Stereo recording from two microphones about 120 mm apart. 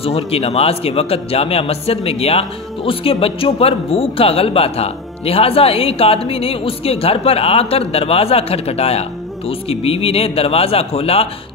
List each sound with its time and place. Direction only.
0.0 s a man's voice: 55° left (ahead or behind)